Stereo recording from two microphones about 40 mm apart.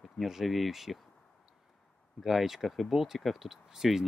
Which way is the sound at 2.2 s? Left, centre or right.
Centre.